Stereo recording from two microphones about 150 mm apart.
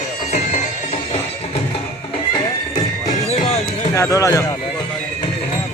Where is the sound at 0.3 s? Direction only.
55° left (ahead or behind).